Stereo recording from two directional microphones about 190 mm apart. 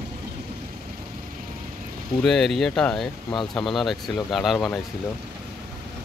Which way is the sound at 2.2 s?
Centre (ahead or behind).